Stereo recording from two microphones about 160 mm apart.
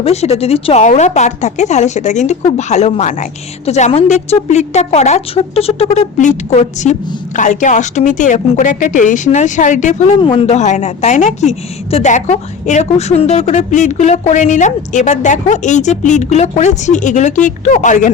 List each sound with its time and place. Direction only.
0.0 s a woman's voice: 40° left (ahead or behind)
10.2 s a woman's voice: 30° left (ahead or behind); by 18.1 s 50° left (ahead or behind)